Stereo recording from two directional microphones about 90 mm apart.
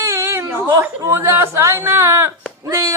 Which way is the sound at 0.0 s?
30° right (ahead or behind).